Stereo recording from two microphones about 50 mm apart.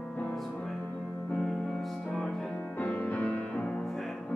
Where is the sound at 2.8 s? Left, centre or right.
Left.